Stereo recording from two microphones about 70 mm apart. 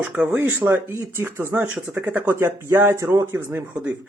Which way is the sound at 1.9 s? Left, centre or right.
Right.